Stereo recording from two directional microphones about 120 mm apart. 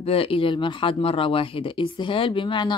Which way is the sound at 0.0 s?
50° left (ahead or behind).